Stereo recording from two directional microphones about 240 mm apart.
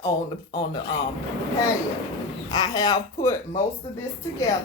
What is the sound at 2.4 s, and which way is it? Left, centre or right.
Speech, centre.